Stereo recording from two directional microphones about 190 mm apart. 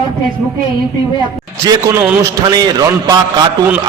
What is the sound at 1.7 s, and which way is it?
A man's voice, 20° right (ahead or behind).